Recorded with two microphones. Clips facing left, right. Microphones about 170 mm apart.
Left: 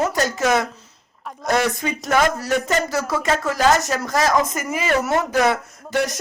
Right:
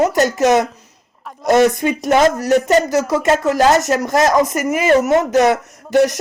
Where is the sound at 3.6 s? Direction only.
45° right (ahead or behind).